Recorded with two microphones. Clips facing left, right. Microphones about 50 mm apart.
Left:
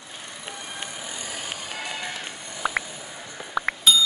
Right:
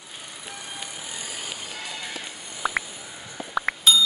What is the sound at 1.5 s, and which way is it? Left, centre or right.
Music, left.